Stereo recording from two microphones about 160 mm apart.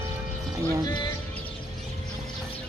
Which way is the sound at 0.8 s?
25° left (ahead or behind).